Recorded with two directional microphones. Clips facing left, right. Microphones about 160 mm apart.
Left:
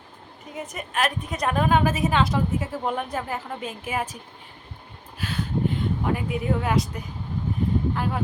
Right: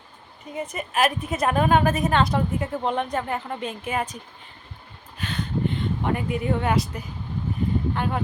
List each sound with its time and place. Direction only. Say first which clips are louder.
0.5 s a woman's voice: right 3 dB; centre (ahead or behind)